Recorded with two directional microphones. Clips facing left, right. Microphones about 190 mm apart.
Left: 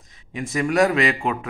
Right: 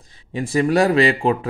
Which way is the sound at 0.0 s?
30° right (ahead or behind).